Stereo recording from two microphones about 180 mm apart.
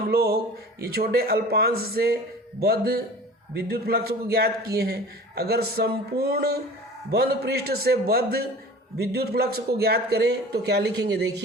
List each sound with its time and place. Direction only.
0.1 s a man's voice: 60° right (ahead or behind)